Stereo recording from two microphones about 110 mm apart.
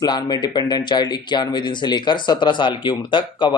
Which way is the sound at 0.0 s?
40° left (ahead or behind).